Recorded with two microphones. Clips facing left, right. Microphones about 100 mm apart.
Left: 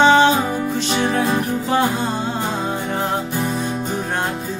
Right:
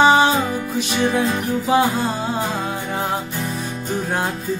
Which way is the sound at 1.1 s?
35° left (ahead or behind).